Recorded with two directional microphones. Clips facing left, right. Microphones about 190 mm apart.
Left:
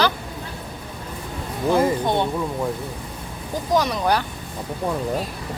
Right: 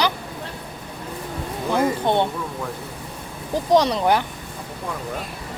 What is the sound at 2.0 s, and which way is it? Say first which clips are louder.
Speech: right 2 dB; 20° right (ahead or behind).